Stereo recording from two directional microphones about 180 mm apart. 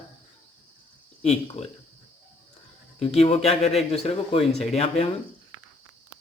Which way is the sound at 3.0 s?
35° left (ahead or behind).